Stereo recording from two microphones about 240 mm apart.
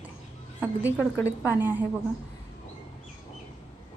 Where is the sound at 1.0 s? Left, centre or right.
Centre.